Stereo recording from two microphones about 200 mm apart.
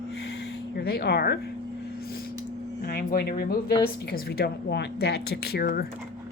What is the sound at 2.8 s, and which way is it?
Speech, 50° left (ahead or behind).